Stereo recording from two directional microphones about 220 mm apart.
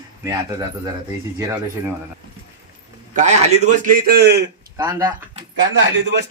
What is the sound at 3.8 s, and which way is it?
Speech, 40° right (ahead or behind).